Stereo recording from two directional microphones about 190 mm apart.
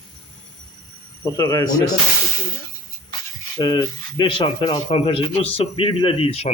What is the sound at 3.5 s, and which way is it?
Speech, 20° left (ahead or behind).